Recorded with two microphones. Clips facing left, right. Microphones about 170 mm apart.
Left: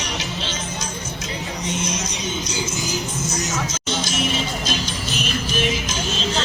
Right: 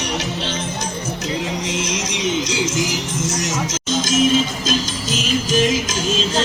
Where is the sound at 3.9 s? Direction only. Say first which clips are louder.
Right 7 dB; 45° right (ahead or behind).